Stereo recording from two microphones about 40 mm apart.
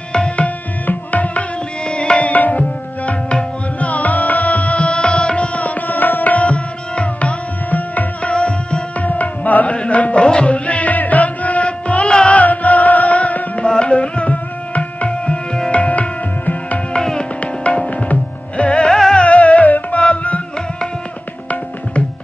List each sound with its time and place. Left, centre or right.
0.8 s tabla: left
1.9 s music: left
2.6 s tabla: left
7.7 s music: left
9.0 s tabla: left
9.8 s music: left
12.1 s music: left
12.4 s music: left
13.7 s tabla: left
15.7 s music: left
16.9 s music: left
17.4 s tabla: left
18.7 s music: left
19.1 s music: left